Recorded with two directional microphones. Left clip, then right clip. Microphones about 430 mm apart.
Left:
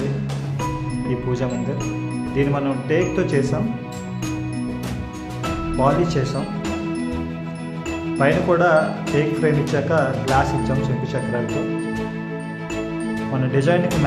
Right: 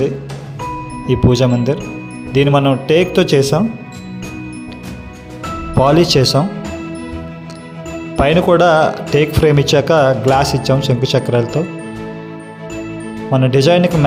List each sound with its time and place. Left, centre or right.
1.3 s speech: centre
5.8 s speech: centre
8.2 s speech: centre
13.3 s speech: centre